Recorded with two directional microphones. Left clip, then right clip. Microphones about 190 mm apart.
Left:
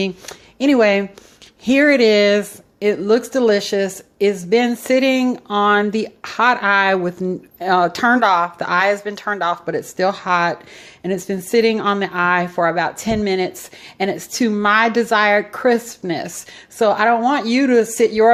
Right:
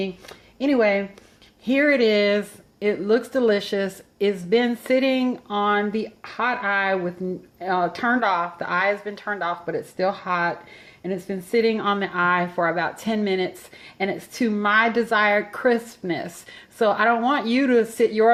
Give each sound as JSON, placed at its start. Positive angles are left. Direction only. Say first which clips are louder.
{"t": 0.0, "sound": "speech", "louder": "left 6 dB", "side_deg": 40}